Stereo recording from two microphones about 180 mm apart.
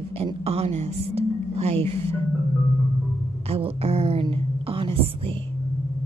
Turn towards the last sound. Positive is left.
turn(degrees=-30)  # may be behind; listen again after turning